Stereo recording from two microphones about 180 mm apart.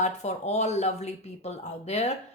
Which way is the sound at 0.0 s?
40° left (ahead or behind).